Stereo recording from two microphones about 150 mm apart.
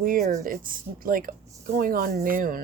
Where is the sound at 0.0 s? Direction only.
70° right (ahead or behind).